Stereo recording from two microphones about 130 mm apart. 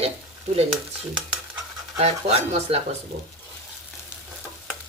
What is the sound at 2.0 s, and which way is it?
Speech, 55° right (ahead or behind).